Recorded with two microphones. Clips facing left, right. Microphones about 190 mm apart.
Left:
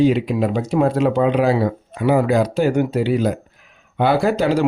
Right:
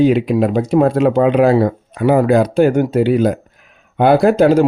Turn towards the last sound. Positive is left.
turn(degrees=-50)  # may be behind; listen again after turning